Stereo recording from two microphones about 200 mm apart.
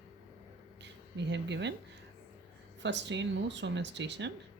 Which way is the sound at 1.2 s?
60° right (ahead or behind).